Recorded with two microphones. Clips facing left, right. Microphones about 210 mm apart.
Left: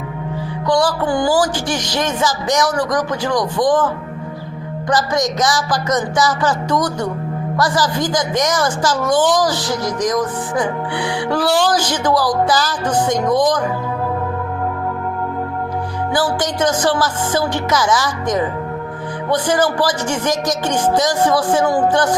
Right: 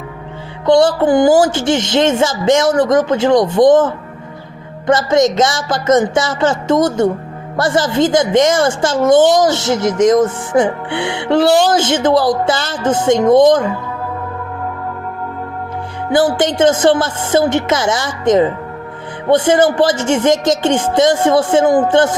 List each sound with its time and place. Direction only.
0.6 s a child's voice: 25° right (ahead or behind)
16.1 s a child's voice: 25° right (ahead or behind)